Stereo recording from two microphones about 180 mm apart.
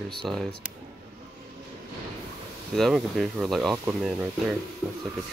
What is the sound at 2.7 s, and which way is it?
Speech, centre (ahead or behind).